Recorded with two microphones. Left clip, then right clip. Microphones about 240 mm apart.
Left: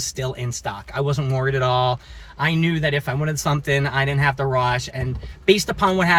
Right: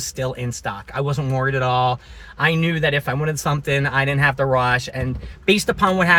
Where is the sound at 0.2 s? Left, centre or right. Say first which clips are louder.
Right 2 dB; centre.